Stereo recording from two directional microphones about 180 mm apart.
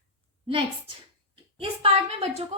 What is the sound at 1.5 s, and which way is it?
Speech, 30° right (ahead or behind).